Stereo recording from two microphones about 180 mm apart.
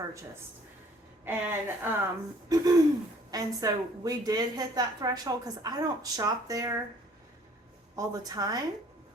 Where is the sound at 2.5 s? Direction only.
20° right (ahead or behind).